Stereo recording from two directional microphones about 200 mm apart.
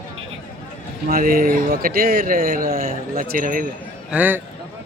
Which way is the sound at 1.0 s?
45° right (ahead or behind).